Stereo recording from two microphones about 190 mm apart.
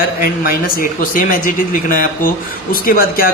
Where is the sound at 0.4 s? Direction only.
50° left (ahead or behind).